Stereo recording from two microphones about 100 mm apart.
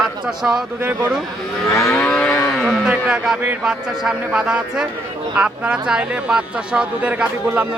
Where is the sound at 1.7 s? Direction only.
25° left (ahead or behind).